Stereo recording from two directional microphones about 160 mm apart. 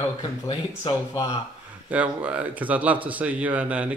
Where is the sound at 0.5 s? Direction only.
25° left (ahead or behind).